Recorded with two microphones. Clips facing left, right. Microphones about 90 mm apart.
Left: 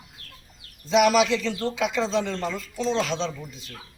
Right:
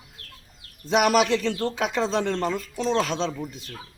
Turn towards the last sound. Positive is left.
turn(degrees=-45)  # may be behind; listen again after turning